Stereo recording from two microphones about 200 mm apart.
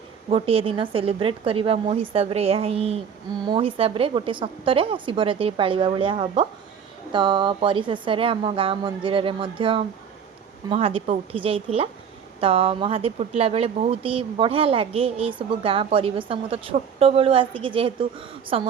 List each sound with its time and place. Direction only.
0.3 s speech: 30° right (ahead or behind)